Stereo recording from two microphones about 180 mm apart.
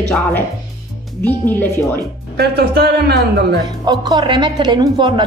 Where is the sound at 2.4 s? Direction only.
65° right (ahead or behind).